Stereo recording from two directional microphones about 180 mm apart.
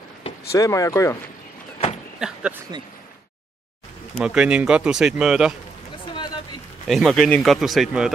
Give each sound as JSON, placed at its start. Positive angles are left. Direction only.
{"t": 0.5, "sound": "speech", "side_deg": 20}
{"t": 2.1, "sound": "speech", "side_deg": -5}
{"t": 4.2, "sound": "speech", "side_deg": -5}
{"t": 6.9, "sound": "speech", "side_deg": 0}